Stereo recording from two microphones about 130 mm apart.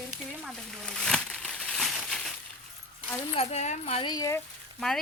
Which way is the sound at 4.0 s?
30° left (ahead or behind).